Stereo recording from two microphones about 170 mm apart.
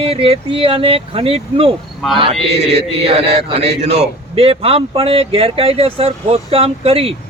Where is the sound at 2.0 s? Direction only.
Centre (ahead or behind).